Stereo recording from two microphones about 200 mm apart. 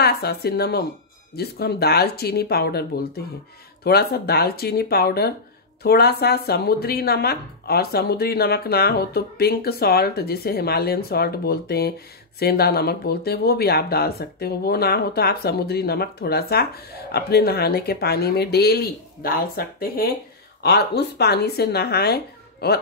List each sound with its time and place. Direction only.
0.0 s speech: 55° left (ahead or behind)